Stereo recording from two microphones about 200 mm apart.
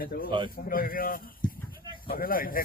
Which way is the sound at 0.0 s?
45° left (ahead or behind).